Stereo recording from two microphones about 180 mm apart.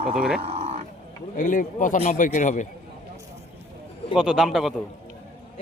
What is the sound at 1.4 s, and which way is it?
Speech, 50° left (ahead or behind).